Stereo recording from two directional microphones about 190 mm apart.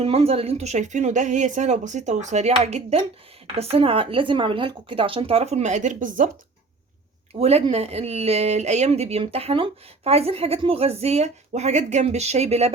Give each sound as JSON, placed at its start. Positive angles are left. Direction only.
{"t": 0.0, "sound": "speech", "side_deg": -30}
{"t": 7.3, "sound": "speech", "side_deg": -30}